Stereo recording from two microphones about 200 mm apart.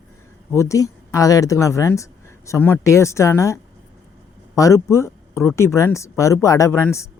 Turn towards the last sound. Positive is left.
turn(degrees=10)  # may be behind; listen again after turning